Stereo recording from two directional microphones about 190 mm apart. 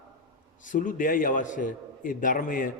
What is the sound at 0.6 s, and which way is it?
A man's voice, 45° left (ahead or behind).